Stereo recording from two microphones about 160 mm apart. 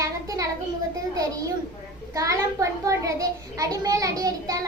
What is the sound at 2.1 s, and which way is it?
A child's voice, 20° right (ahead or behind).